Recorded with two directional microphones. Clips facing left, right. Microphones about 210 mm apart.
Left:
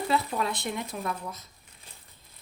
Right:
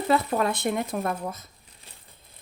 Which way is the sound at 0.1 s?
50° right (ahead or behind).